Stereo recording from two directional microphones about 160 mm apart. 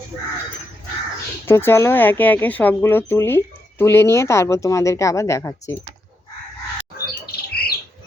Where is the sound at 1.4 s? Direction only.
15° left (ahead or behind).